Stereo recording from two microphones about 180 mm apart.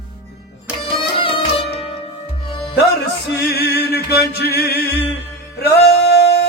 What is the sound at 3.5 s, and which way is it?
Music, 60° left (ahead or behind).